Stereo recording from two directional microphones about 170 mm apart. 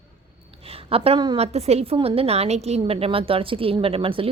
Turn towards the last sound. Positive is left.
turn(degrees=-30)  # may be behind; listen again after turning